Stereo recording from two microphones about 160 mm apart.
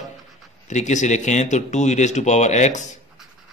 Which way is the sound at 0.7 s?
45° left (ahead or behind).